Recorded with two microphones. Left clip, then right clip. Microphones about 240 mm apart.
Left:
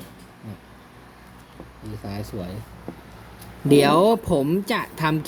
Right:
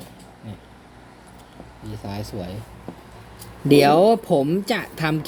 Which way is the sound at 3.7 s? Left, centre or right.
Centre.